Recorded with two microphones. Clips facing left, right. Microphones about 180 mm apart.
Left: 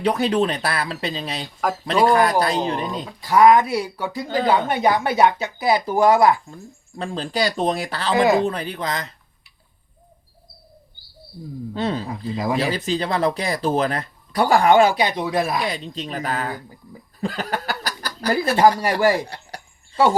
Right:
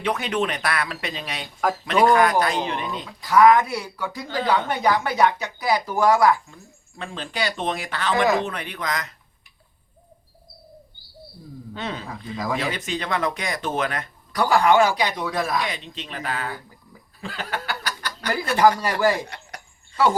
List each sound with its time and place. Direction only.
0.0 s speech: 35° left (ahead or behind)
3.2 s speech: 25° left (ahead or behind)
11.7 s speech: 35° left (ahead or behind)